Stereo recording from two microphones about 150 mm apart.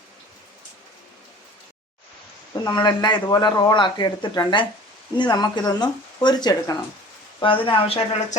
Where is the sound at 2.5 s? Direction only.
30° left (ahead or behind).